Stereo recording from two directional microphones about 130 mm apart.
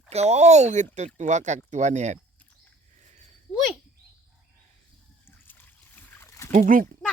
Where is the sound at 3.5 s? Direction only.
Centre (ahead or behind).